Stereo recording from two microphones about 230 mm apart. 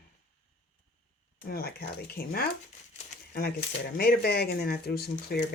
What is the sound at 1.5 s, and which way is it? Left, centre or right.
Speech, left.